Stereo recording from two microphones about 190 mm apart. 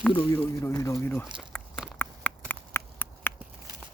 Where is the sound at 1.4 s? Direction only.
Centre (ahead or behind).